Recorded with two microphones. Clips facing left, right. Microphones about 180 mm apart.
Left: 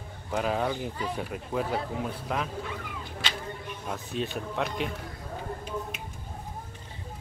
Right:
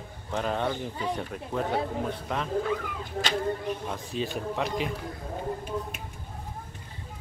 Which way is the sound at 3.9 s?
Centre (ahead or behind).